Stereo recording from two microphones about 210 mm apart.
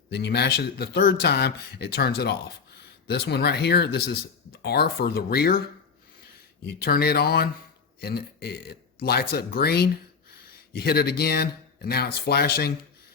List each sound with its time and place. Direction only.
0.1 s speech: 50° left (ahead or behind)
6.7 s speech: 45° left (ahead or behind)